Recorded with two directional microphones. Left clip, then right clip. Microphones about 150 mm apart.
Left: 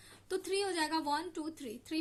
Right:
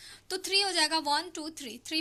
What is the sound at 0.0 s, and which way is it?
A woman's voice, 15° right (ahead or behind).